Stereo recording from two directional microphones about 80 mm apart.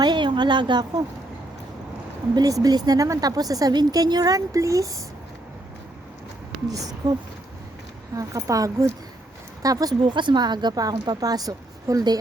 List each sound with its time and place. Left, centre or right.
0.0 s a woman's voice: right
2.3 s speech: right
6.7 s speech: right
8.1 s speech: right
10.0 s a woman's voice: right